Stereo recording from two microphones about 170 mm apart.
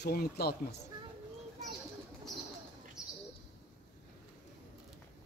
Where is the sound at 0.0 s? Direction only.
65° left (ahead or behind).